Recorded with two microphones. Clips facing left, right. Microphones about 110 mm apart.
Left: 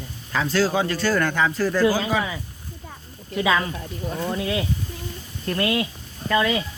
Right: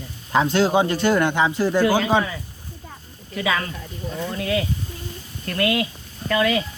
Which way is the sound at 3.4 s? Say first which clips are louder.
Left 2 dB; 20° left (ahead or behind).